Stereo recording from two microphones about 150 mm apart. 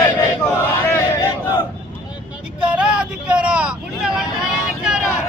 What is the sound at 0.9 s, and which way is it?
Battle cry, 25° left (ahead or behind).